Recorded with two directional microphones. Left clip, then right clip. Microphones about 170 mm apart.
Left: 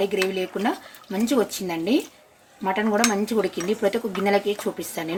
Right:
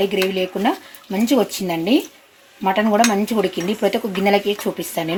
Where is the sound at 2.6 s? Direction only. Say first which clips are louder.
Right 6 dB; 40° right (ahead or behind).